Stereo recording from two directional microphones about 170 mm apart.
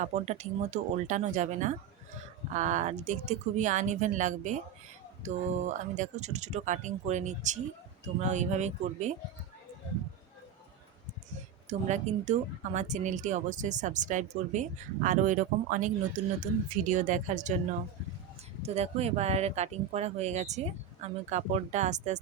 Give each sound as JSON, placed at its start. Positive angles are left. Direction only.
{"t": 0.0, "sound": "speech", "side_deg": -40}
{"t": 11.7, "sound": "speech", "side_deg": -45}
{"t": 18.6, "sound": "speech", "side_deg": -40}